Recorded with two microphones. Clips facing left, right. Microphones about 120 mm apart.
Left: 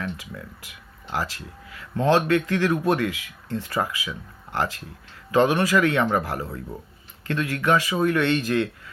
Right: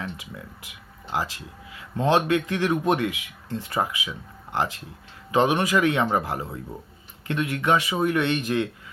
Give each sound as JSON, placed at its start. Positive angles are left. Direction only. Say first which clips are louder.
{"t": 0.0, "sound": "speech", "louder": "left 2 dB", "side_deg": -20}